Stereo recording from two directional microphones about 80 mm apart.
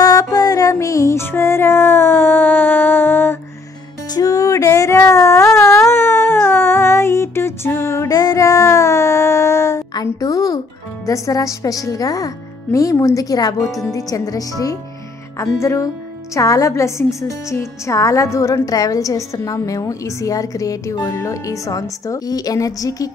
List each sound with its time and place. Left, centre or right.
0.3 s music: left
4.1 s music: left
4.6 s a sound: left
8.1 s a sound: left
9.9 s music: left
11.1 s a woman's voice: left
15.3 s a woman's voice: left